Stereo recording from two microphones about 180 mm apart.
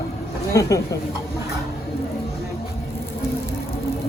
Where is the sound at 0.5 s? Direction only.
20° left (ahead or behind).